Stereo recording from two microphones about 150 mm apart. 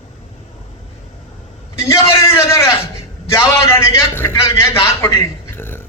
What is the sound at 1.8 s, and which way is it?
A man's voice, 20° left (ahead or behind).